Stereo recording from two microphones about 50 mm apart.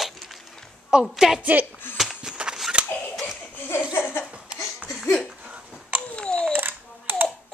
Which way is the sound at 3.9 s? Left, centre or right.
Left.